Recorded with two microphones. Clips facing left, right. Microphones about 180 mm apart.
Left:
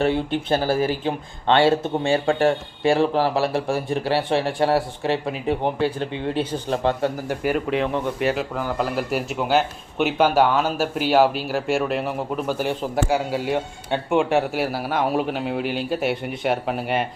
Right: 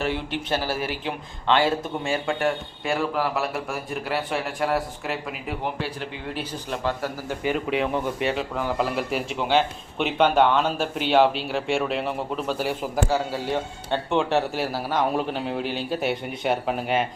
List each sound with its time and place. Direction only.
0.8 s speech: 35° left (ahead or behind)
7.3 s a man's voice: 5° left (ahead or behind)